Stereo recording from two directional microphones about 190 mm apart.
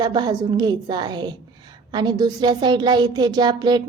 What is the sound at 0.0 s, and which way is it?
Speech, 20° right (ahead or behind).